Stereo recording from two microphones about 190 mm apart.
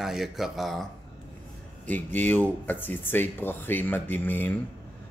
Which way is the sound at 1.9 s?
10° left (ahead or behind).